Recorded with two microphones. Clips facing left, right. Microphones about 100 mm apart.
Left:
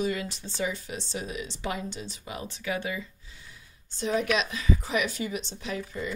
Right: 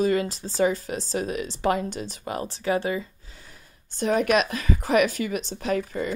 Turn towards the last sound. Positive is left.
turn(degrees=-55)  # may be behind; listen again after turning